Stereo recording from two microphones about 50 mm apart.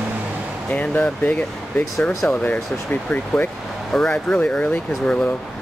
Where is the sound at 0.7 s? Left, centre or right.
Left.